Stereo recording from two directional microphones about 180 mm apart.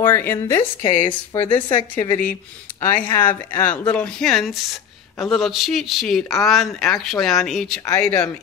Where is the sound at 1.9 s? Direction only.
10° left (ahead or behind).